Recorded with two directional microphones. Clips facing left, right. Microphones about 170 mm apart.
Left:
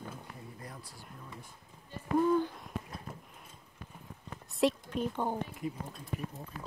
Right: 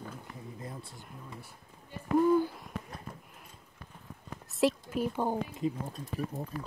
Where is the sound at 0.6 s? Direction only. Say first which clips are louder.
Right 4 dB; 25° right (ahead or behind).